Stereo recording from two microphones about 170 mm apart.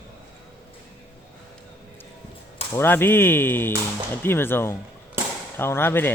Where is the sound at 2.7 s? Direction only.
15° left (ahead or behind).